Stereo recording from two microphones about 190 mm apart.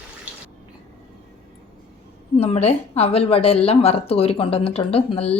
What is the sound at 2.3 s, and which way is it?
A woman's voice, 35° left (ahead or behind).